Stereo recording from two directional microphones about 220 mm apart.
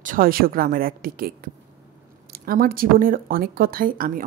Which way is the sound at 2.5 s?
40° right (ahead or behind).